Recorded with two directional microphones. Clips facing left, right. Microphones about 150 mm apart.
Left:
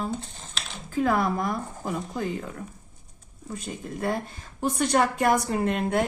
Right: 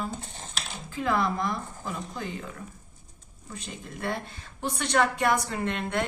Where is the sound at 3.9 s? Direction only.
40° left (ahead or behind).